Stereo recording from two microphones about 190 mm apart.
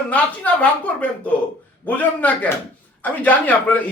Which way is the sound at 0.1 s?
10° left (ahead or behind).